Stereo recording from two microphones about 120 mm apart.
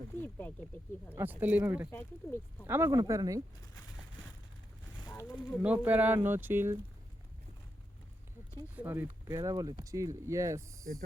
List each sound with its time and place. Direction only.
0.2 s speech: 15° left (ahead or behind)
1.1 s speech: 15° right (ahead or behind)
1.9 s speech: 15° left (ahead or behind)
2.6 s speech: 20° right (ahead or behind)
2.9 s speech: 30° right (ahead or behind)
5.2 s speech: 15° left (ahead or behind)
5.5 s speech: 10° right (ahead or behind)
8.7 s speech: 15° right (ahead or behind)